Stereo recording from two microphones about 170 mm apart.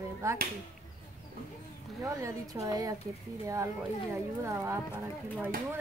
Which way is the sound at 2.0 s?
20° right (ahead or behind).